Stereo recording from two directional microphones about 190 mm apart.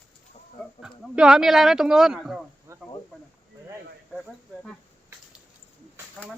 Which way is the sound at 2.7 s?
15° right (ahead or behind).